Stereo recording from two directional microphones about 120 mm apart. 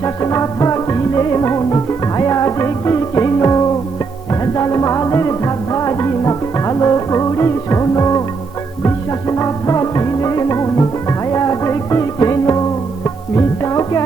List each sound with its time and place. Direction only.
0.0 s music: 25° left (ahead or behind)
9.4 s music: 25° left (ahead or behind)